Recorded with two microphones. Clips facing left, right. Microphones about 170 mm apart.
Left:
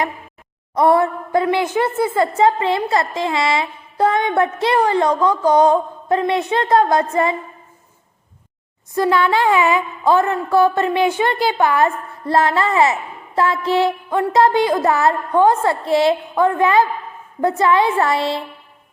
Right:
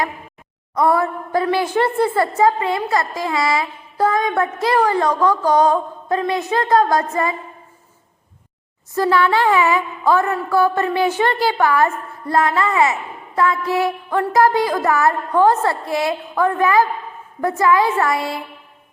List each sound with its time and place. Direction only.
0.7 s a woman's voice: 25° left (ahead or behind)
9.0 s a woman's voice: 20° left (ahead or behind)